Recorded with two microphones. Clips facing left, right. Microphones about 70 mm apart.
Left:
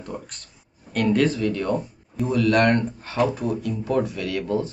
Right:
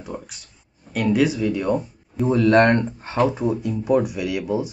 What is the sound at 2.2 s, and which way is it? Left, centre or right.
Speech, right.